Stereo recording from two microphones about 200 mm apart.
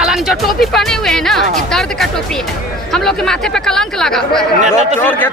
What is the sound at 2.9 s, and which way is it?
Speech, centre (ahead or behind).